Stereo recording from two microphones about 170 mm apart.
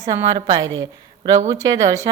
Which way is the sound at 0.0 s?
20° right (ahead or behind).